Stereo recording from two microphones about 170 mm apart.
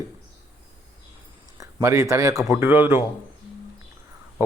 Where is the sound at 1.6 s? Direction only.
20° right (ahead or behind).